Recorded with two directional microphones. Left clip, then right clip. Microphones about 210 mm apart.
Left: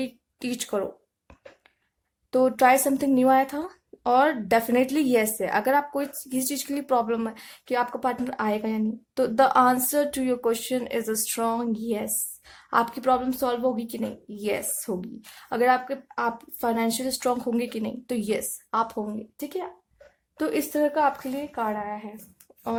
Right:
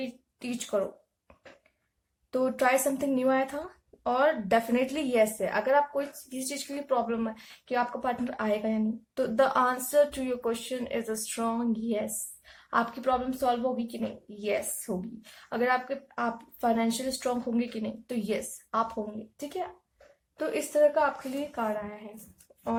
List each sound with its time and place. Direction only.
0.0 s speech: 45° left (ahead or behind)
2.3 s speech: 40° left (ahead or behind)
20.3 s speech: 45° left (ahead or behind)